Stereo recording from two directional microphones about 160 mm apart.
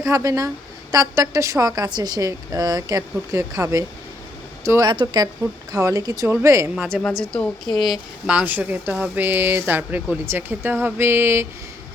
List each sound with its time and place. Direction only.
0.0 s a woman's voice: 20° right (ahead or behind)
6.9 s a woman's voice: 5° left (ahead or behind); by 11.4 s 15° right (ahead or behind)